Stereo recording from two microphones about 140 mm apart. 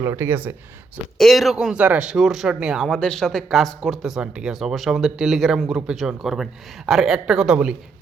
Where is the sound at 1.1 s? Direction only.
Centre (ahead or behind).